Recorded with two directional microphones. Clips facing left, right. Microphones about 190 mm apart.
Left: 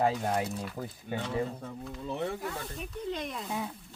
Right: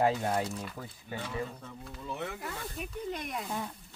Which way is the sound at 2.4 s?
Centre (ahead or behind).